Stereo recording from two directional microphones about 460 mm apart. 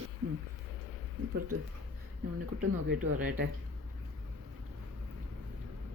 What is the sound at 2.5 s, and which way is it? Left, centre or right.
Speech, centre.